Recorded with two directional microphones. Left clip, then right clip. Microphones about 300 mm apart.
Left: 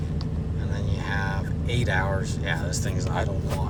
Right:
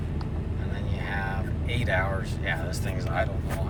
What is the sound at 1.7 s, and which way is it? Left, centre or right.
Vehicle, centre.